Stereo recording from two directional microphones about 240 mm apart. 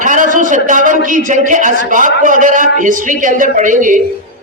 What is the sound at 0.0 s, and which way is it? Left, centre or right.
A man's voice, right.